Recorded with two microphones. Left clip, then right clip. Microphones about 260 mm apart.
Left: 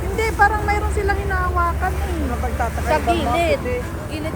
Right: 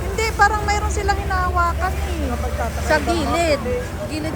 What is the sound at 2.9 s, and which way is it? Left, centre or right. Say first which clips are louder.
Speech: even; right.